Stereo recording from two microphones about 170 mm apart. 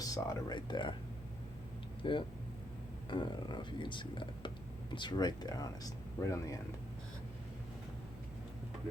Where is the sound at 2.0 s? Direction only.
30° left (ahead or behind).